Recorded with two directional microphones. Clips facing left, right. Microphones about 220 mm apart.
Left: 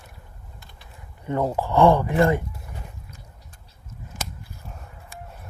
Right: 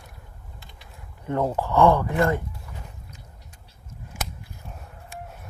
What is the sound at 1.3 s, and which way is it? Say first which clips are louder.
Speech: left 1 dB; 5° left (ahead or behind).